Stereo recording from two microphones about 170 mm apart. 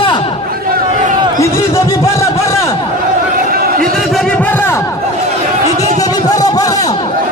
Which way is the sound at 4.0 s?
Centre (ahead or behind).